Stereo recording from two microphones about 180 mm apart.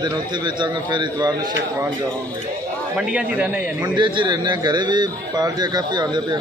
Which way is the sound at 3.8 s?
25° right (ahead or behind).